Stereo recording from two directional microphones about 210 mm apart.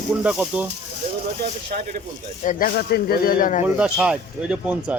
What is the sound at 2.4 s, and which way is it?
Speech, 40° left (ahead or behind).